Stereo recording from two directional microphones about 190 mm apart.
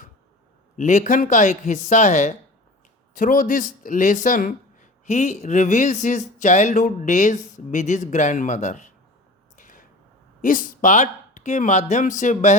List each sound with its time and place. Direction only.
0.8 s speech: 40° left (ahead or behind)
9.6 s a sound: 45° left (ahead or behind)
10.4 s speech: 45° left (ahead or behind)